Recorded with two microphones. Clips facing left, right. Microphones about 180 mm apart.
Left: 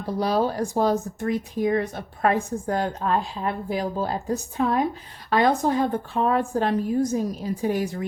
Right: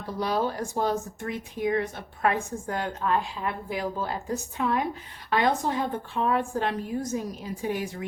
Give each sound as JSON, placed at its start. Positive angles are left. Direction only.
{"t": 0.2, "sound": "speech", "side_deg": 35}